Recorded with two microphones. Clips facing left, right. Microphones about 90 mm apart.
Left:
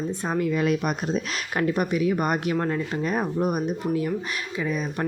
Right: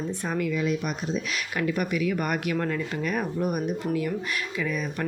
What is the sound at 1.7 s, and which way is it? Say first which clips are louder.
Speech: left 3 dB; 30° left (ahead or behind).